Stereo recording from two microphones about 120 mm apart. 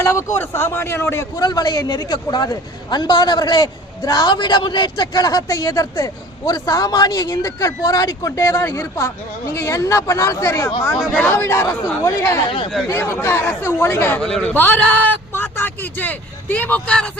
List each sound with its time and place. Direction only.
0.0 s speech: 20° left (ahead or behind)
1.4 s a man's voice: 35° left (ahead or behind); by 14.2 s 20° left (ahead or behind)
14.2 s a man's voice: 5° left (ahead or behind)